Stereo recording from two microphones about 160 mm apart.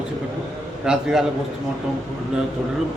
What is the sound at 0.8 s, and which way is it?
Speech, 5° right (ahead or behind).